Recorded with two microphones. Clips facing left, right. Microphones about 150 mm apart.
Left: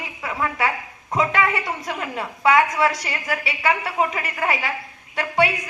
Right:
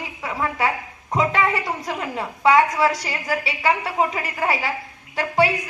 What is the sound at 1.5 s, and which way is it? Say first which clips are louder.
Speech: right 1 dB; centre (ahead or behind).